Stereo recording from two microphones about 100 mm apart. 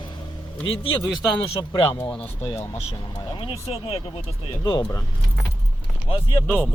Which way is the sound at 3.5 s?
75° left (ahead or behind).